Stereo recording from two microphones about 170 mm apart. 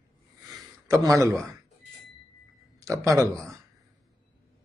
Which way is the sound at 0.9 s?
20° right (ahead or behind).